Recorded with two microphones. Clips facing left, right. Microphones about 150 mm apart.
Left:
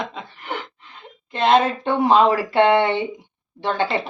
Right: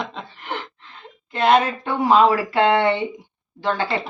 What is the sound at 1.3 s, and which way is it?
Speech, 20° left (ahead or behind).